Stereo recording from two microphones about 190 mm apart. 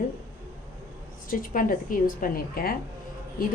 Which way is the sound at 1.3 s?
45° left (ahead or behind).